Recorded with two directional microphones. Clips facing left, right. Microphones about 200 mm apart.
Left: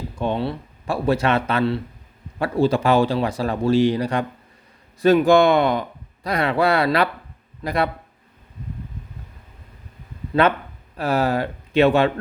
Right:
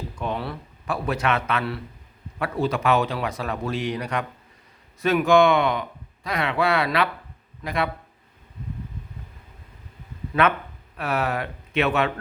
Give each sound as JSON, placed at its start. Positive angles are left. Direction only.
{"t": 0.2, "sound": "a man's voice", "side_deg": 25}
{"t": 10.9, "sound": "speech", "side_deg": 35}